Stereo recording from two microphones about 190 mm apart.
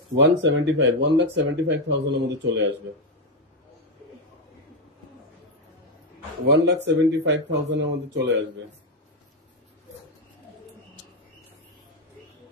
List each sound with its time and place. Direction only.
0.1 s speech: 70° right (ahead or behind)
6.6 s speech: 65° right (ahead or behind)